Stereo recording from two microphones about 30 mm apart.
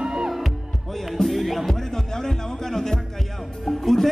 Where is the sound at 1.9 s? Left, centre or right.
Centre.